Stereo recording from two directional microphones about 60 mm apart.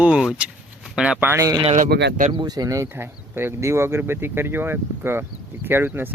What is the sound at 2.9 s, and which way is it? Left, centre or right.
Speech, right.